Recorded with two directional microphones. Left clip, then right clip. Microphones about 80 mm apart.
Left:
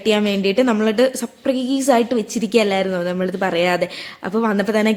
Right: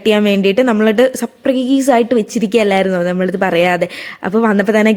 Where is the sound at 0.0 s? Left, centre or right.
Right.